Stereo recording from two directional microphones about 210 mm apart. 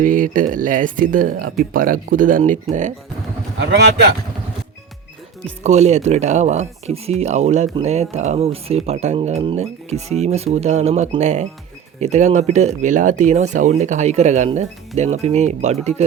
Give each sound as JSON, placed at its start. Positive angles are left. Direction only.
{"t": 0.0, "sound": "speech", "side_deg": -40}
{"t": 3.6, "sound": "a man's voice", "side_deg": -55}
{"t": 5.6, "sound": "speech", "side_deg": -30}